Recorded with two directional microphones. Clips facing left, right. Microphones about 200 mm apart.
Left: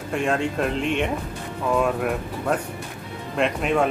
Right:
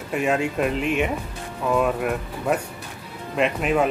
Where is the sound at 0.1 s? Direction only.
5° right (ahead or behind).